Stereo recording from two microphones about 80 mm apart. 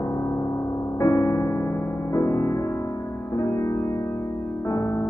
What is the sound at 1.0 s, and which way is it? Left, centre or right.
Music, left.